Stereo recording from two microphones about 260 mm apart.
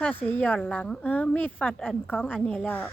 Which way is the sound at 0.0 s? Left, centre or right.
Centre.